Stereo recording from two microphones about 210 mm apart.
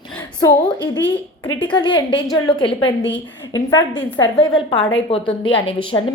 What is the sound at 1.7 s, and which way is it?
A woman's voice, 20° left (ahead or behind).